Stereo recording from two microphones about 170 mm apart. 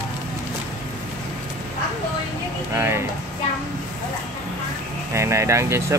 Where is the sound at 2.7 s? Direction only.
15° right (ahead or behind).